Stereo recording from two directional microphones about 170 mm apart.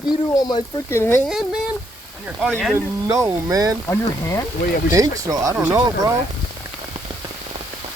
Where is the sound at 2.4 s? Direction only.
Centre (ahead or behind).